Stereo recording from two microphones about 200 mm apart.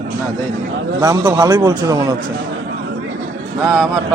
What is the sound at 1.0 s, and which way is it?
A man's voice, 15° right (ahead or behind).